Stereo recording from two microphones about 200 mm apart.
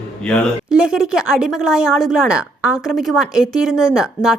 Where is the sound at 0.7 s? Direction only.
5° right (ahead or behind).